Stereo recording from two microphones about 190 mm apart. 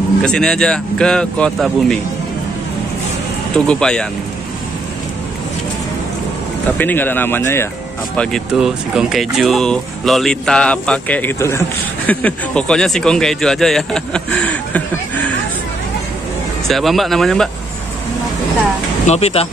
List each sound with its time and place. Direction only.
0.2 s speech: 5° left (ahead or behind)
3.5 s speech: 5° left (ahead or behind)
6.8 s speech: 10° left (ahead or behind)
8.2 s speech: centre (ahead or behind)
16.6 s speech: centre (ahead or behind)
19.0 s speech: 35° left (ahead or behind)